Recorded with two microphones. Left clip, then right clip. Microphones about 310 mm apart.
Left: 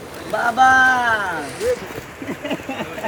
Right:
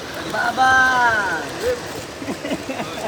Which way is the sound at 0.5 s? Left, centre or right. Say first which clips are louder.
Left 2 dB; left.